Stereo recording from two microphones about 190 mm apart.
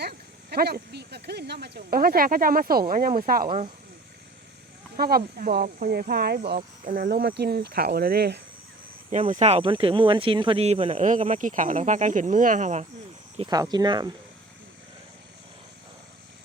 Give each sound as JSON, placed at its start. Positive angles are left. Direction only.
{"t": 0.0, "sound": "speech", "side_deg": -55}
{"t": 4.9, "sound": "speech", "side_deg": -50}
{"t": 6.6, "sound": "speech", "side_deg": -45}
{"t": 9.0, "sound": "speech", "side_deg": -35}
{"t": 13.4, "sound": "speech", "side_deg": -20}